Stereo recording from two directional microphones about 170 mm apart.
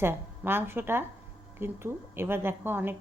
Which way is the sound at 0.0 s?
15° right (ahead or behind).